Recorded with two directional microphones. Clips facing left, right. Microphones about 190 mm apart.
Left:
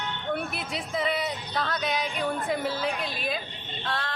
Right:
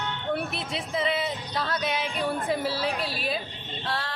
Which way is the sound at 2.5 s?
30° right (ahead or behind).